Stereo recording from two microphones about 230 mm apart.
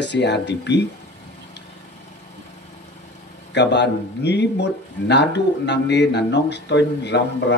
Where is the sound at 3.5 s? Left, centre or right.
Left.